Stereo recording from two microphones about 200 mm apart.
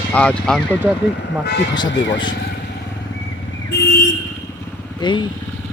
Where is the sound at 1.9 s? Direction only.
65° left (ahead or behind).